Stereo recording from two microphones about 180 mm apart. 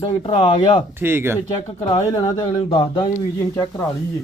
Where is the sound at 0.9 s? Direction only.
10° right (ahead or behind).